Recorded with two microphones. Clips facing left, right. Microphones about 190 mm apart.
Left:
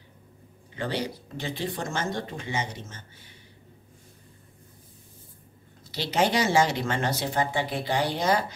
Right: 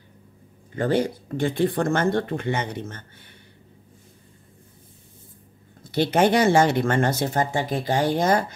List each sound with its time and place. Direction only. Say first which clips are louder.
0.7 s speech: right 8 dB; 50° right (ahead or behind)
5.9 s speech: right 6 dB; 55° right (ahead or behind)